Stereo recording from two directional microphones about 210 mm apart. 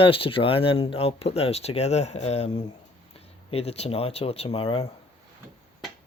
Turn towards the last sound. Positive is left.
turn(degrees=25)  # may be behind; listen again after turning